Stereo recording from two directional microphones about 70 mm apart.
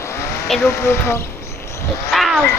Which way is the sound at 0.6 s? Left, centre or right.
Left.